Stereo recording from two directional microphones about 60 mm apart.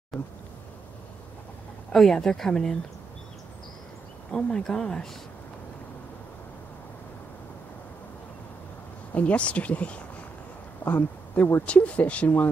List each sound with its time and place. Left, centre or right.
0.1 s speech: centre
1.9 s speech: centre
4.3 s speech: centre
9.1 s speech: left